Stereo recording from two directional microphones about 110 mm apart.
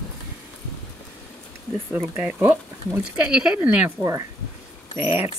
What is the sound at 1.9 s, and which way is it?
Speech, 15° right (ahead or behind).